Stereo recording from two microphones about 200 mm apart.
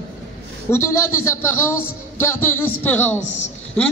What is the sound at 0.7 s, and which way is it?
A man's voice, 15° left (ahead or behind).